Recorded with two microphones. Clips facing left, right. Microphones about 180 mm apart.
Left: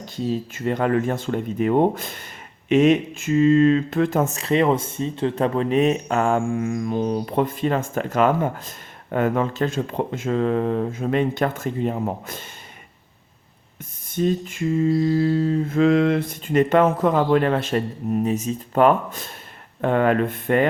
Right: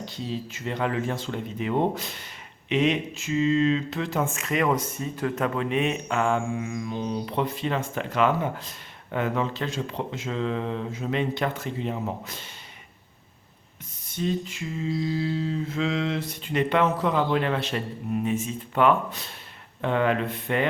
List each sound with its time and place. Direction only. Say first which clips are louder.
0.0 s speech: left 7 dB; 50° left (ahead or behind)
14.1 s speech: left 6 dB; 50° left (ahead or behind)